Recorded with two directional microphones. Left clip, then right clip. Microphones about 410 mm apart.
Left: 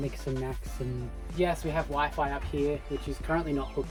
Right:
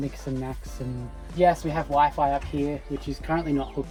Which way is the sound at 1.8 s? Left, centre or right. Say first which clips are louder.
Right 11 dB; centre.